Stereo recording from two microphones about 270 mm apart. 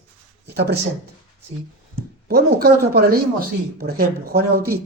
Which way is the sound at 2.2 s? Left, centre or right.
Right.